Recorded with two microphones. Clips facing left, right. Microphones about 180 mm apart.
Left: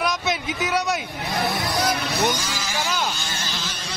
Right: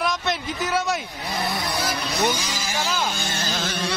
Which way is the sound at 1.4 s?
Centre (ahead or behind).